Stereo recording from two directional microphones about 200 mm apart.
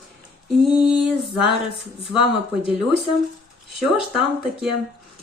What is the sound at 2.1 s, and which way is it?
Speech, 5° right (ahead or behind).